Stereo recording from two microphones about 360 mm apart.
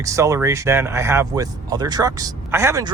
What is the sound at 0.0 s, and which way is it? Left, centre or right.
Speech, centre.